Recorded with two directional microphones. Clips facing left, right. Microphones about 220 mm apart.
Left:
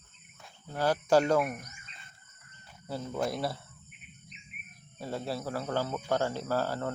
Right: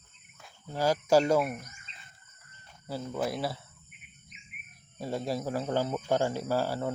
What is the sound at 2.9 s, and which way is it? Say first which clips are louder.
Cricket: even; 5° right (ahead or behind).